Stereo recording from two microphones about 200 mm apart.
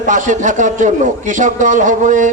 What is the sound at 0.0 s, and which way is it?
A man's voice, 40° right (ahead or behind).